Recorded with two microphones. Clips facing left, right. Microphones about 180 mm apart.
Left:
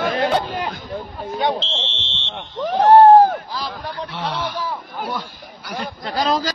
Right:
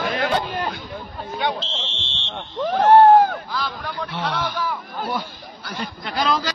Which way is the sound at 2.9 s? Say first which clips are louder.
Left 3 dB; 35° left (ahead or behind).